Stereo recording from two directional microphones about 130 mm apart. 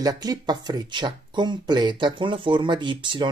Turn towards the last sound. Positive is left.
turn(degrees=-35)  # may be behind; listen again after turning